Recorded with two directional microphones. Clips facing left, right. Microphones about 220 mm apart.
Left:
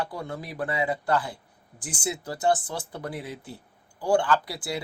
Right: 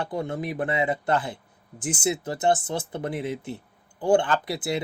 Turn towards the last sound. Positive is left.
turn(degrees=-20)  # may be behind; listen again after turning